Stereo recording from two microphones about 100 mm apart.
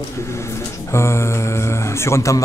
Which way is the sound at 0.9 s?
30° left (ahead or behind).